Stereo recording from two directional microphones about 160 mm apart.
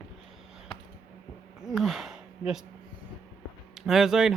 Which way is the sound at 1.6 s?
Centre (ahead or behind).